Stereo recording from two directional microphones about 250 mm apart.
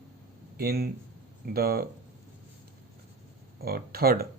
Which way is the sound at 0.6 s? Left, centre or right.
Right.